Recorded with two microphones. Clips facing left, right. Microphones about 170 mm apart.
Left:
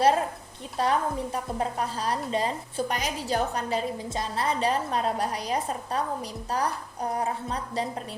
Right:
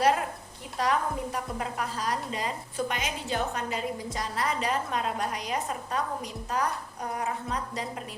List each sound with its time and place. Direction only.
0.8 s a woman's voice: 30° left (ahead or behind)